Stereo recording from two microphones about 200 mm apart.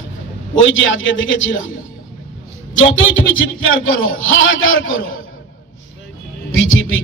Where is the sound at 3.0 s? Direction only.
75° left (ahead or behind).